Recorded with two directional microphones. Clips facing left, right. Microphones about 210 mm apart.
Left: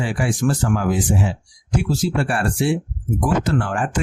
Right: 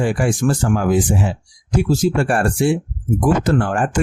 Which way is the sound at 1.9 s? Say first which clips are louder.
Right 5 dB; 45° right (ahead or behind).